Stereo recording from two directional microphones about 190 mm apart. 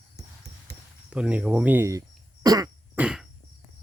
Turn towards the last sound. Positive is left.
turn(degrees=-5)  # may be behind; listen again after turning